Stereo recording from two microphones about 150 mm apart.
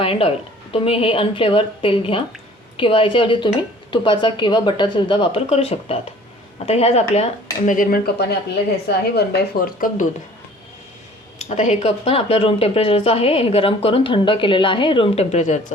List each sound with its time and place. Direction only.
0.0 s a woman's voice: 40° left (ahead or behind); by 10.1 s 70° left (ahead or behind)
11.4 s speech: 50° left (ahead or behind)